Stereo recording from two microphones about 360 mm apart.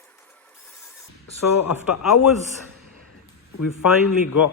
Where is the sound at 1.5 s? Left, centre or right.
Left.